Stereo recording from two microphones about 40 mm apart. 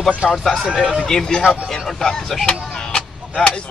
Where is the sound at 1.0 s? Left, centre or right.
Centre.